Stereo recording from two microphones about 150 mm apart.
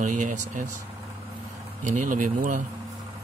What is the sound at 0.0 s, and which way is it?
Speech, 60° right (ahead or behind).